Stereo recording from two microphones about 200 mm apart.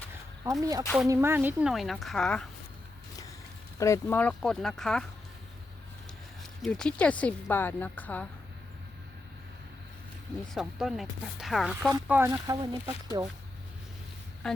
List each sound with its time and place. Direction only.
0.6 s speech: 15° right (ahead or behind); by 2.5 s 5° left (ahead or behind)
3.8 s speech: 15° left (ahead or behind)
6.6 s a woman's voice: 5° left (ahead or behind)
10.5 s speech: centre (ahead or behind)
14.4 s speech: 5° left (ahead or behind)